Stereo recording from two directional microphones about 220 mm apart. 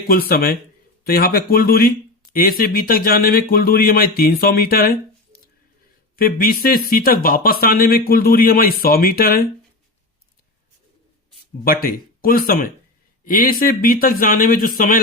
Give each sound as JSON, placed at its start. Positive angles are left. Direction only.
{"t": 0.1, "sound": "speech", "side_deg": 45}
{"t": 11.6, "sound": "speech", "side_deg": 40}